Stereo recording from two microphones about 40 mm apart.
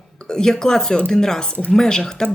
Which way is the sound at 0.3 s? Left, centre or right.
Centre.